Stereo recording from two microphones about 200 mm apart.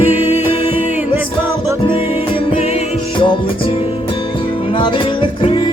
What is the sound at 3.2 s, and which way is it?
Music, 25° left (ahead or behind).